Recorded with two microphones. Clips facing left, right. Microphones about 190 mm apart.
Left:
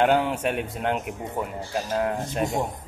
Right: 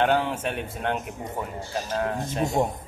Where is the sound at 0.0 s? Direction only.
10° left (ahead or behind).